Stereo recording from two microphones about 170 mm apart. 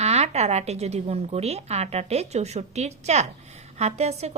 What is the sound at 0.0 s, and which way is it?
A woman's voice, 40° right (ahead or behind).